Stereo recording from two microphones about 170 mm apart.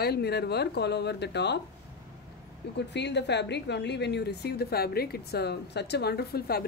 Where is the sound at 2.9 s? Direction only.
90° left.